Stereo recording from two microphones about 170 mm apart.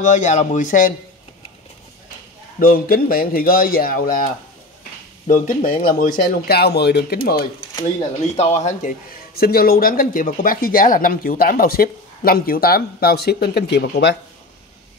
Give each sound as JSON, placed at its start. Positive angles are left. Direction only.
{"t": 0.0, "sound": "speech", "side_deg": 45}
{"t": 2.6, "sound": "speech", "side_deg": 60}
{"t": 7.8, "sound": "speech", "side_deg": 40}
{"t": 8.6, "sound": "speech", "side_deg": 55}